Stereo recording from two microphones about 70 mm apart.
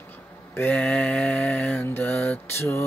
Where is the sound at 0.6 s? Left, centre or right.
Left.